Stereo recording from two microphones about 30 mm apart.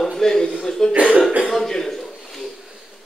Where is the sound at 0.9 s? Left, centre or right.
Right.